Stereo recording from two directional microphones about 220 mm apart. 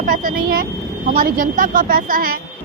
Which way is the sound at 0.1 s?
40° right (ahead or behind).